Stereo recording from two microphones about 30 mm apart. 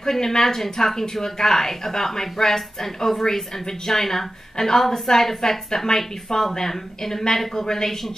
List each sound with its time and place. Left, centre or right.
0.0 s speech: centre